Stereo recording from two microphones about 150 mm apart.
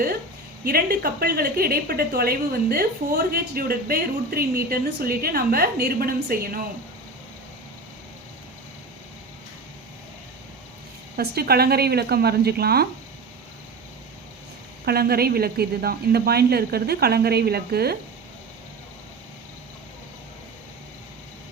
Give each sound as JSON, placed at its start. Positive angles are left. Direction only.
{"t": 0.6, "sound": "a woman's voice", "side_deg": -70}
{"t": 11.2, "sound": "a woman's voice", "side_deg": -90}
{"t": 14.8, "sound": "a woman's voice", "side_deg": -90}